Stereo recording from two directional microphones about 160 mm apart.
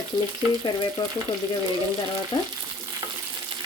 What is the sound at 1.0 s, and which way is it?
Frying, 30° left (ahead or behind).